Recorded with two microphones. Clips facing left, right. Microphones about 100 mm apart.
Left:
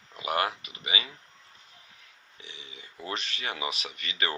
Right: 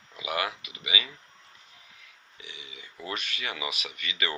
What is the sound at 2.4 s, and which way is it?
Speech, 35° left (ahead or behind).